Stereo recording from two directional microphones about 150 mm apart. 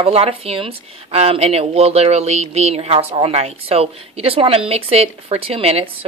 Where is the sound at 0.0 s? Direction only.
40° right (ahead or behind).